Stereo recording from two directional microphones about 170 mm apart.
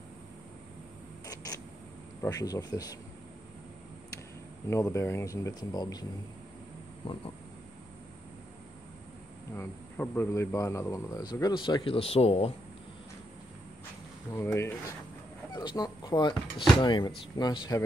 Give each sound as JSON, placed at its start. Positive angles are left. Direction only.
{"t": 1.2, "sound": "a sound", "side_deg": 20}
{"t": 2.2, "sound": "speech", "side_deg": 20}
{"t": 4.6, "sound": "speech", "side_deg": 15}
{"t": 7.0, "sound": "cricket", "side_deg": 30}
{"t": 9.6, "sound": "speech", "side_deg": 15}
{"t": 14.3, "sound": "speech", "side_deg": 15}